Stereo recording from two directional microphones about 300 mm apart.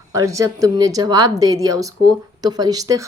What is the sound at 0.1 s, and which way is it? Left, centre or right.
Speech, centre.